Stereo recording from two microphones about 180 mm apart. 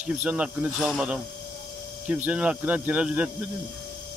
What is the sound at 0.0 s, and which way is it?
Speech, 10° right (ahead or behind).